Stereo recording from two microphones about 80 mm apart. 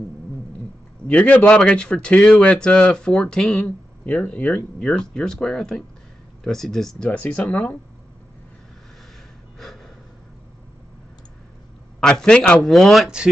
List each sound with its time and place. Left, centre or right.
1.0 s a man's voice: centre
7.1 s speech: centre
12.0 s speech: centre
12.6 s speech: centre